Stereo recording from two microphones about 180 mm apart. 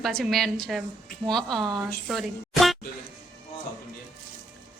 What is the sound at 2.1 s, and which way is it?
Speech, centre (ahead or behind).